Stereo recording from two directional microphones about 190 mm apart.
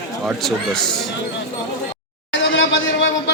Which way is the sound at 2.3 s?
80° left.